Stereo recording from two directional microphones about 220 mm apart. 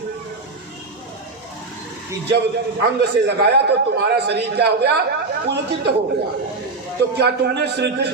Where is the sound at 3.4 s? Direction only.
50° right (ahead or behind).